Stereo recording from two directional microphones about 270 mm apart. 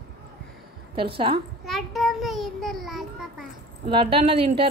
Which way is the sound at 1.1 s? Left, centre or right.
Centre.